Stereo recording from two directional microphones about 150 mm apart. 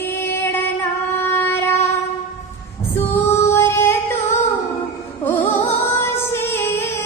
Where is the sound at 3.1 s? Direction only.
15° left (ahead or behind).